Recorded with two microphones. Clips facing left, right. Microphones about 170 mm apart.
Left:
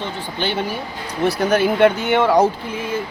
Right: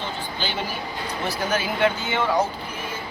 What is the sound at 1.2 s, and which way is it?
Speech, 60° left (ahead or behind).